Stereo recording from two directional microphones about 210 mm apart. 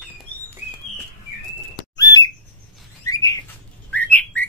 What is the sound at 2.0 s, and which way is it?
Squawk, 15° left (ahead or behind).